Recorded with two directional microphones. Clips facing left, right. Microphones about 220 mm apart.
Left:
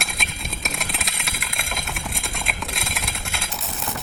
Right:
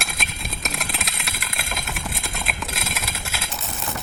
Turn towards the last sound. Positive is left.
turn(degrees=0)  # may be behind; listen again after turning